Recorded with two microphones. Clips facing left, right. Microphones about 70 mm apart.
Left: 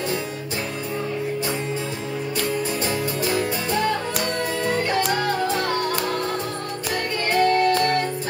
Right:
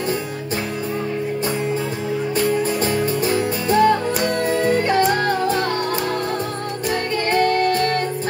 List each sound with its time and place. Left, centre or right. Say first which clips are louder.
2.8 s music: right 4 dB; right
7.2 s music: even; right